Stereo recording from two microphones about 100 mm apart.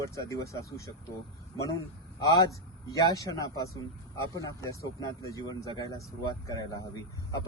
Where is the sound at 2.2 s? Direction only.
40° left (ahead or behind).